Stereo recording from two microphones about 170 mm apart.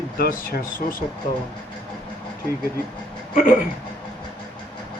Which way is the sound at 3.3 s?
45° left (ahead or behind).